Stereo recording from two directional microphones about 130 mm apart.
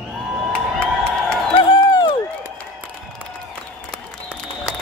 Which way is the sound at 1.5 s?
35° left (ahead or behind).